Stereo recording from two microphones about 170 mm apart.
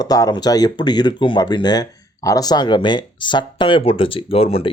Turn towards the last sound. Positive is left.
turn(degrees=35)  # may be behind; listen again after turning